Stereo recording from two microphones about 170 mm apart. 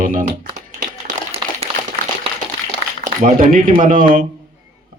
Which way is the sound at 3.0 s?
55° right (ahead or behind).